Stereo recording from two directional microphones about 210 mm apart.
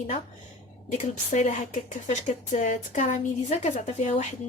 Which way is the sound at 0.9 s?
35° left (ahead or behind).